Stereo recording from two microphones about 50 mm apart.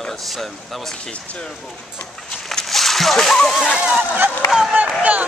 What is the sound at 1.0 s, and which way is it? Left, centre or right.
Speech, left.